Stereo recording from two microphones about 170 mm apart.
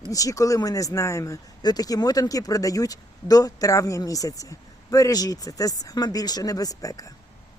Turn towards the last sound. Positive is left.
turn(degrees=20)  # may be behind; listen again after turning